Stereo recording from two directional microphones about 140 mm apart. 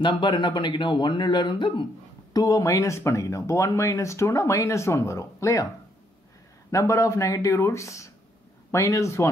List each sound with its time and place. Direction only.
0.0 s a man's voice: 35° left (ahead or behind)
6.7 s speech: 20° left (ahead or behind)